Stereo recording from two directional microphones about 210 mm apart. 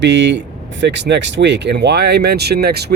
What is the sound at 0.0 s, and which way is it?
Speech, 55° right (ahead or behind).